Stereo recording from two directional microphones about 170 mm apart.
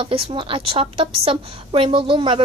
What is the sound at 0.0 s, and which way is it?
A woman's voice, 30° right (ahead or behind).